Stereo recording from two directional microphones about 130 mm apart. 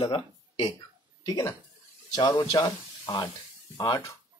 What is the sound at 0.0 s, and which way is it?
Speech, 35° left (ahead or behind).